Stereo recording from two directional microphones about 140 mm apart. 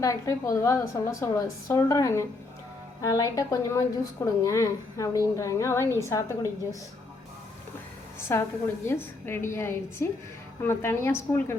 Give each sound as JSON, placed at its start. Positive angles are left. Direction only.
{"t": 0.0, "sound": "a woman's voice", "side_deg": 25}
{"t": 8.3, "sound": "a woman's voice", "side_deg": 15}